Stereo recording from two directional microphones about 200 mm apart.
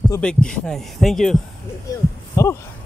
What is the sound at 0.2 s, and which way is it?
Speech, 5° left (ahead or behind).